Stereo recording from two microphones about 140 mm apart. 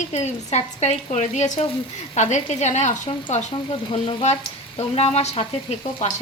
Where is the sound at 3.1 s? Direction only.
40° left (ahead or behind).